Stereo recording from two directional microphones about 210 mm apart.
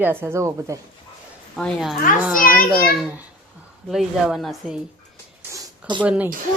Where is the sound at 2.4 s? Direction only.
40° left (ahead or behind).